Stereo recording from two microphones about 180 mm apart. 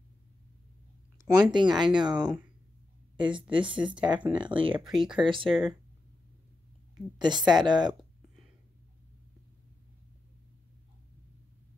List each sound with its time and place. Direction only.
1.1 s speech: 20° right (ahead or behind)
3.2 s speech: 25° right (ahead or behind)
4.8 s speech: 5° right (ahead or behind)
5.2 s speech: 25° right (ahead or behind)
7.2 s speech: 25° right (ahead or behind)